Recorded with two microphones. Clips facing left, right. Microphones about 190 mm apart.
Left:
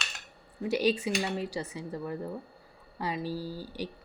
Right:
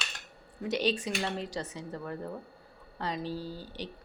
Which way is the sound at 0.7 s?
10° left (ahead or behind).